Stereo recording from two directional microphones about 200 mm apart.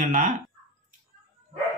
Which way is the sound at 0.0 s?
40° right (ahead or behind).